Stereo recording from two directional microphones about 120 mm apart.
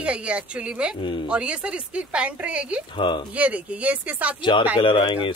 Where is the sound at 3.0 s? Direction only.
45° left (ahead or behind).